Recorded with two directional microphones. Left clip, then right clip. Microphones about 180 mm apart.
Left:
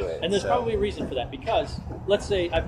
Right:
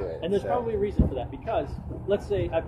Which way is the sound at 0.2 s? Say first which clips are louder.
Left 2 dB; 5° right (ahead or behind).